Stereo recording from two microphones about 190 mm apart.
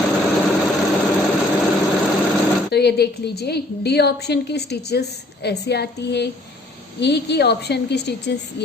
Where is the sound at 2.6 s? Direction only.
60° left (ahead or behind).